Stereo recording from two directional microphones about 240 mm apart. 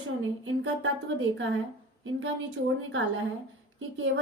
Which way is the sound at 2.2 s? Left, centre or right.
Right.